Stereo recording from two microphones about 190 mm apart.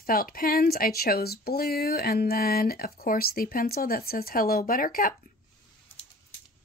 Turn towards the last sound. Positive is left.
turn(degrees=45)  # may be behind; listen again after turning